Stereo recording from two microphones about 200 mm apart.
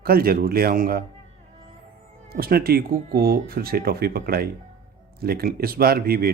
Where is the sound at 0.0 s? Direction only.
50° right (ahead or behind).